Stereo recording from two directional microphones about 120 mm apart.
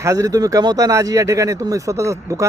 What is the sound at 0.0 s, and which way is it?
Speech, 30° right (ahead or behind).